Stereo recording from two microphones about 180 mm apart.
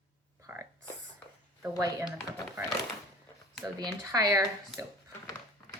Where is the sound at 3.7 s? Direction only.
20° right (ahead or behind).